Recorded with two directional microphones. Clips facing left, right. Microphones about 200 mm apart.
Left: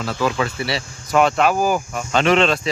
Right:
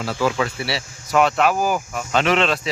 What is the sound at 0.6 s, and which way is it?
Speech, 5° right (ahead or behind).